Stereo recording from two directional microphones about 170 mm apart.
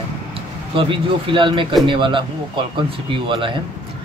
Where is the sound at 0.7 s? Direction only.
30° right (ahead or behind).